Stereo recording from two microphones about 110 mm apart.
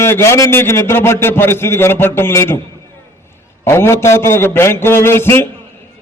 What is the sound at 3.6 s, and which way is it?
A man's voice, 25° left (ahead or behind).